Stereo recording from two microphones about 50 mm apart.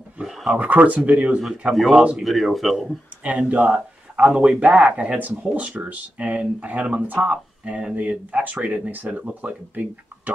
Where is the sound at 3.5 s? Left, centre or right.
Right.